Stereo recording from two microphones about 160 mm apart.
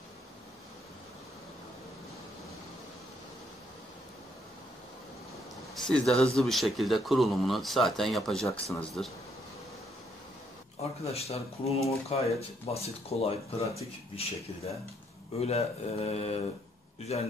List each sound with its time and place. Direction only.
5.8 s speech: 5° left (ahead or behind)
10.8 s speech: 40° left (ahead or behind)